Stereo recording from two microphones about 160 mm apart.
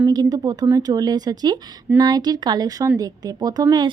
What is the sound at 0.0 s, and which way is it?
Speech, 25° right (ahead or behind).